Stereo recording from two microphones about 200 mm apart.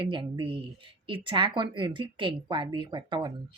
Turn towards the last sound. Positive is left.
turn(degrees=-25)  # may be behind; listen again after turning